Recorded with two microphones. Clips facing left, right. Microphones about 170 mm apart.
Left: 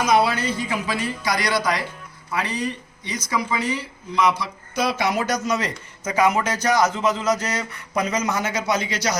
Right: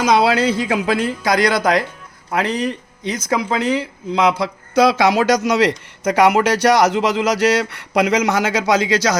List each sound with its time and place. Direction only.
0.0 s speech: 90° right
1.2 s speech: 50° right (ahead or behind)
2.3 s a man's voice: 90° right